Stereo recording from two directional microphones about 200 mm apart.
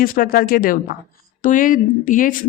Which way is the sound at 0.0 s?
45° left (ahead or behind).